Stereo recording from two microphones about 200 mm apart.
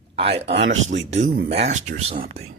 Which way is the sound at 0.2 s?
30° right (ahead or behind).